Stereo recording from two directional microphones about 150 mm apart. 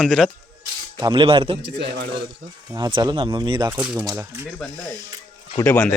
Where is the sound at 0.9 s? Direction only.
35° right (ahead or behind).